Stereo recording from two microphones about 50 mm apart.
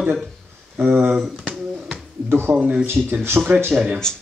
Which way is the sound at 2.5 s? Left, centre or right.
Right.